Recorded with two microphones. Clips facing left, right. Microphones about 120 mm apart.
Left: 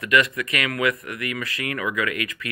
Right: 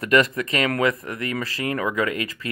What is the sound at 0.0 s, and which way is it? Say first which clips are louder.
Speech: right 2 dB; 35° right (ahead or behind).